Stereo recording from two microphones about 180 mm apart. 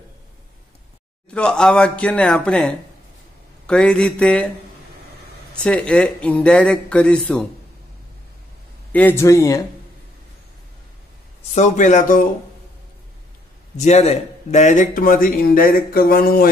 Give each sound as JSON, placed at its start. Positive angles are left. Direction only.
{"t": 1.3, "sound": "speech", "side_deg": 5}
{"t": 5.6, "sound": "speech", "side_deg": 5}
{"t": 8.9, "sound": "speech", "side_deg": 10}
{"t": 11.5, "sound": "a man's voice", "side_deg": 40}
{"t": 13.7, "sound": "a man's voice", "side_deg": 40}